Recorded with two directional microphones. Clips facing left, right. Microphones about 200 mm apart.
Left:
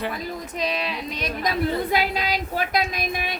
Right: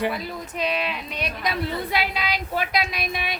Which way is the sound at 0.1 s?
40° left (ahead or behind).